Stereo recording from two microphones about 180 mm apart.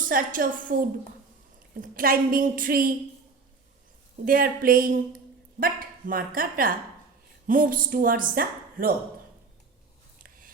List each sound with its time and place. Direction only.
0.1 s speech: 50° right (ahead or behind)
4.3 s speech: 50° right (ahead or behind)